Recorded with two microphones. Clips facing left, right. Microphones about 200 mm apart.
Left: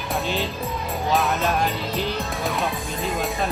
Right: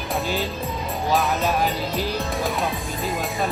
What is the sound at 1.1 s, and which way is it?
Speech, centre (ahead or behind).